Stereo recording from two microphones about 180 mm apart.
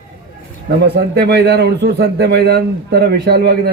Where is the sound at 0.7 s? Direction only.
65° right (ahead or behind).